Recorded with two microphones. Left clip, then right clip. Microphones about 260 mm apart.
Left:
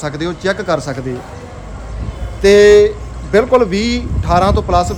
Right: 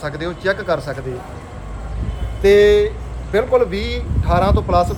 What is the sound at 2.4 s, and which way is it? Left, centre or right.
A man's voice, left.